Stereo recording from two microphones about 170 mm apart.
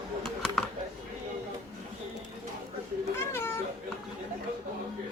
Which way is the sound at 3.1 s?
15° left (ahead or behind).